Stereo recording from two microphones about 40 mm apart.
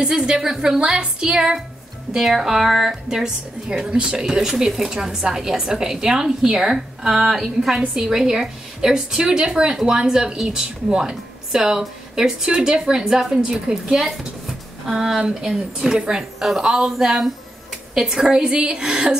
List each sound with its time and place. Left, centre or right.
0.0 s a woman's voice: centre
2.1 s a woman's voice: centre